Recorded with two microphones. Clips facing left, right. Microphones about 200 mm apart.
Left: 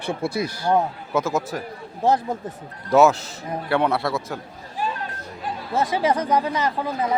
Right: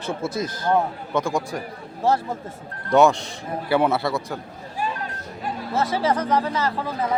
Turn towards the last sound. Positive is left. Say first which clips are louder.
# left 1 dB
turn(degrees=15)  # may be behind; listen again after turning